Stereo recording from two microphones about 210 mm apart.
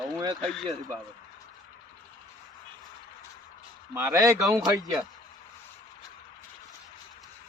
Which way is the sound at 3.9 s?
10° right (ahead or behind).